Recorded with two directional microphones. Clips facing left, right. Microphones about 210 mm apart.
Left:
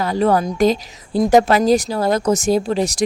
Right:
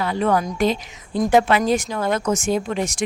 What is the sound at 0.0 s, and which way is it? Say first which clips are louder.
A woman's voice: left 4 dB; 40° left (ahead or behind).